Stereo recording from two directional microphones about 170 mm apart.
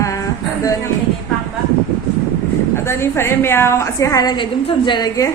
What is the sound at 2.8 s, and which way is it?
A woman's voice, 15° left (ahead or behind).